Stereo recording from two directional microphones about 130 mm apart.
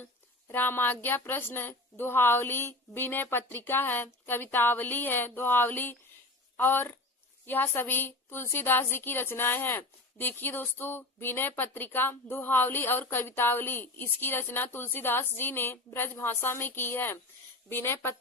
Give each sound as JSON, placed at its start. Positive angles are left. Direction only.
{"t": 0.0, "sound": "a woman's voice", "side_deg": 15}